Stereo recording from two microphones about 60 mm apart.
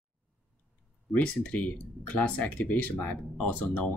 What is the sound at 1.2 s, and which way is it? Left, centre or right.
Speech, left.